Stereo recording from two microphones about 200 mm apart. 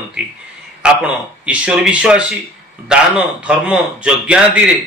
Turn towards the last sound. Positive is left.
turn(degrees=-5)  # may be behind; listen again after turning